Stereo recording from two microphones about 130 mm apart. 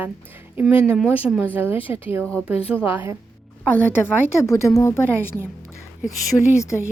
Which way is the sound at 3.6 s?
15° left (ahead or behind).